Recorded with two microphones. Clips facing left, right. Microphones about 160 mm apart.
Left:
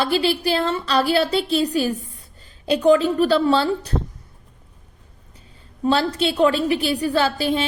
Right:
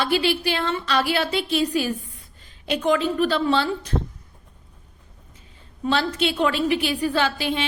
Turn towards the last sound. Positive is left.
turn(degrees=40)  # may be behind; listen again after turning